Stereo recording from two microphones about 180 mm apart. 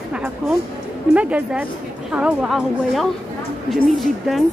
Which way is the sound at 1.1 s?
5° right (ahead or behind).